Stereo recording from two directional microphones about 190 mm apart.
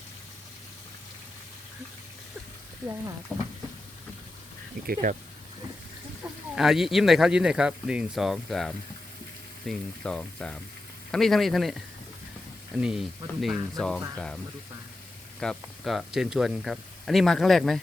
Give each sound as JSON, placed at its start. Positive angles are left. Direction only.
{"t": 3.3, "sound": "speech", "side_deg": -5}
{"t": 5.0, "sound": "speech", "side_deg": -45}
{"t": 6.2, "sound": "speech", "side_deg": -5}
{"t": 15.4, "sound": "speech", "side_deg": 0}